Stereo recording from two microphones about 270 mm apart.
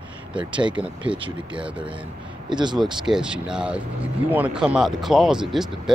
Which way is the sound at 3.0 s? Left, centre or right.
Centre.